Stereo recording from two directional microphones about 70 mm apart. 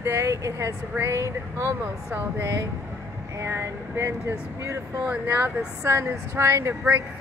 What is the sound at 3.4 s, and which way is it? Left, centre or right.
Speech, right.